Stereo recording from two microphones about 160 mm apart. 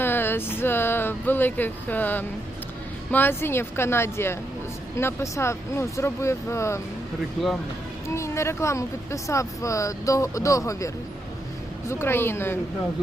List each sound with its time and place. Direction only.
0.0 s speech: 15° left (ahead or behind)
8.0 s speech: 15° left (ahead or behind)